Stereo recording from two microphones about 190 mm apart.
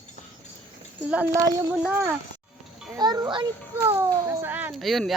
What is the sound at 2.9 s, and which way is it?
A child's voice, 20° right (ahead or behind).